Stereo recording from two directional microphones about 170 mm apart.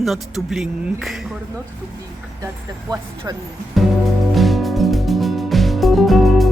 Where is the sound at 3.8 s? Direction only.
Centre (ahead or behind).